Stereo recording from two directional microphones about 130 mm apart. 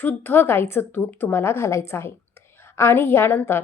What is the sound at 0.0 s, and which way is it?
A woman's voice, 15° left (ahead or behind).